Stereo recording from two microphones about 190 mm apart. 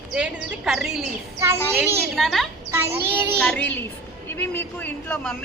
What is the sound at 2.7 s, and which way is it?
Child singing, 15° right (ahead or behind).